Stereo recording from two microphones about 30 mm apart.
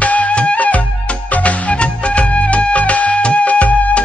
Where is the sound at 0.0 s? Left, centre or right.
Left.